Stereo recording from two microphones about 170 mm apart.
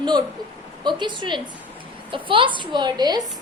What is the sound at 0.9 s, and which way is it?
A woman's voice, 25° right (ahead or behind).